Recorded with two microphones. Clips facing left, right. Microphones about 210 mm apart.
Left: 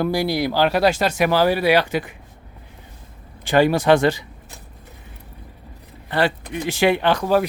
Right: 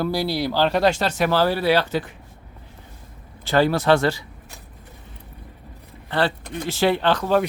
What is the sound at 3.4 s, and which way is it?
Speech, 15° left (ahead or behind).